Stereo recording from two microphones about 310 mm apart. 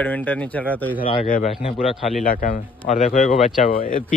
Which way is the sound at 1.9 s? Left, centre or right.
Centre.